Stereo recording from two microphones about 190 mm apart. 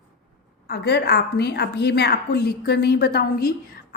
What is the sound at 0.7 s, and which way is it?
A woman's voice, 60° left (ahead or behind).